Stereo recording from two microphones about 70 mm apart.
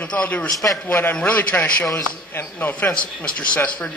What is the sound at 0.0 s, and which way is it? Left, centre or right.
A man's voice, centre.